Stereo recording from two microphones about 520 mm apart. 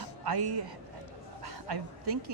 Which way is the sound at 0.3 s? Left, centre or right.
Right.